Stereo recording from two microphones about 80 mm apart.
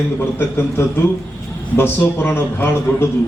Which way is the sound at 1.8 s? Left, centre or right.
Left.